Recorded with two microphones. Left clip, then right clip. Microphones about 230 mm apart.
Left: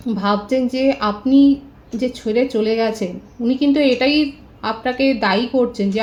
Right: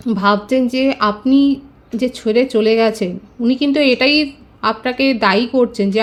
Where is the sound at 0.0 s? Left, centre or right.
Right.